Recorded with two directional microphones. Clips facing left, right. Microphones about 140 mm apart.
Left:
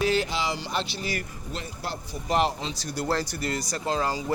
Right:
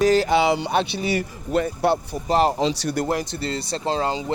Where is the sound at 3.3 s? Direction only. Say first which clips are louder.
Right 3 dB; 30° right (ahead or behind).